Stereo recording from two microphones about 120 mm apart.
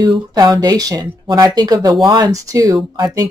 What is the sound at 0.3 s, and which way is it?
Speech, 35° right (ahead or behind).